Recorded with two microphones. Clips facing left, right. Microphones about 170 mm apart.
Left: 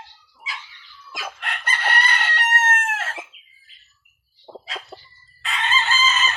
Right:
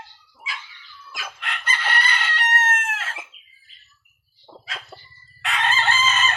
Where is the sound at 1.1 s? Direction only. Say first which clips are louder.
Left 2 dB; 40° left (ahead or behind).